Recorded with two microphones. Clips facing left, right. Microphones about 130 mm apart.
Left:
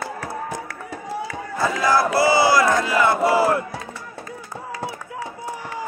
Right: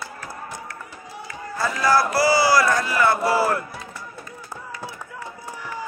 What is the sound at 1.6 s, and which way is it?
Speech, 20° left (ahead or behind).